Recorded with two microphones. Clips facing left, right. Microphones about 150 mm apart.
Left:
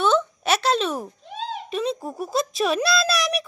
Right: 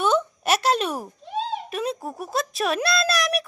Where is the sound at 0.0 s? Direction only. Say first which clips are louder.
Left 1 dB; 10° right (ahead or behind).